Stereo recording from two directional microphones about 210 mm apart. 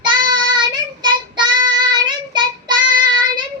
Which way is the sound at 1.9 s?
20° right (ahead or behind).